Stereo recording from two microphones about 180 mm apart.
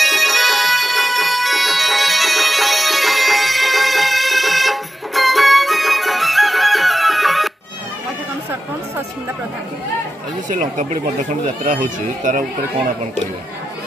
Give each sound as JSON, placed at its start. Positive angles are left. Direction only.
{"t": 0.0, "sound": "music", "side_deg": 0}
{"t": 10.5, "sound": "speech", "side_deg": -45}